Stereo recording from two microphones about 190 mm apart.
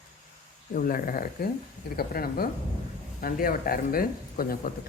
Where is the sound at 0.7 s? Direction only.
45° left (ahead or behind).